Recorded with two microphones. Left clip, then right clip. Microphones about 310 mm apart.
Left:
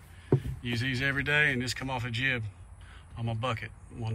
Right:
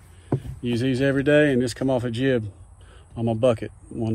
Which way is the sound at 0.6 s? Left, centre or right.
Right.